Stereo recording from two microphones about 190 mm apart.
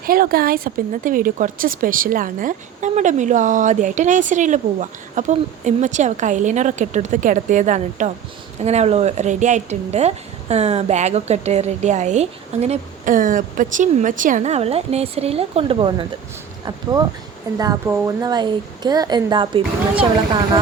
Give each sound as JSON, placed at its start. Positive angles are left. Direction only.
{"t": 0.0, "sound": "a woman's voice", "side_deg": -50}
{"t": 17.6, "sound": "speech", "side_deg": -20}